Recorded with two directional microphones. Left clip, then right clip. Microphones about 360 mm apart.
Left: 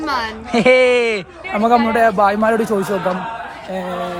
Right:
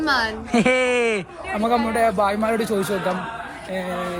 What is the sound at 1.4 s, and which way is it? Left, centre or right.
Speech, left.